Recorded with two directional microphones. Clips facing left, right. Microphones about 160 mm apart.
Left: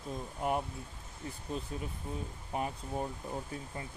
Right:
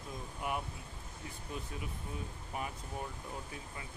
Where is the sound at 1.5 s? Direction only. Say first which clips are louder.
Left 3 dB; 30° left (ahead or behind).